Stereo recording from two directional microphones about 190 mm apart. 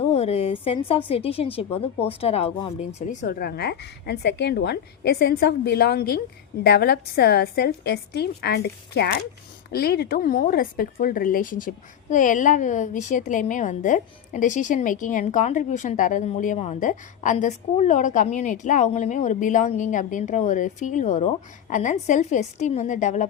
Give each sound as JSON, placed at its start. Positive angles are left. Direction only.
{"t": 0.0, "sound": "a woman's voice", "side_deg": 35}